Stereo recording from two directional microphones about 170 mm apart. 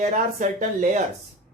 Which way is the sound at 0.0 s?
45° right (ahead or behind).